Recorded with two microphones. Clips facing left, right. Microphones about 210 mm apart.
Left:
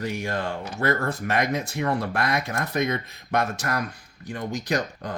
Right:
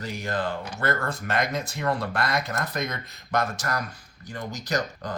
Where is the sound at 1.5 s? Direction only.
60° left (ahead or behind).